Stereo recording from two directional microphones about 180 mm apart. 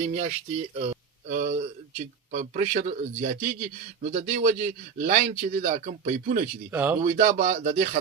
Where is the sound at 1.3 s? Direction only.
40° right (ahead or behind).